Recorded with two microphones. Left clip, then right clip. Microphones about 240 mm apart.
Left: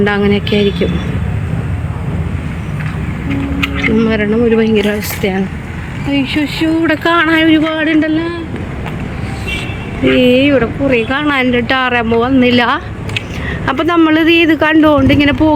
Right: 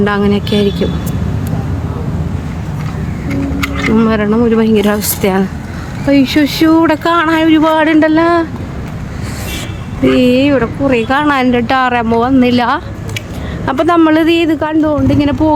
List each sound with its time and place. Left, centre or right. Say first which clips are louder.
0.0 s speech: even; centre
3.9 s speech: right 3 dB; centre
6.8 s speech: even; centre
10.0 s speech: even; centre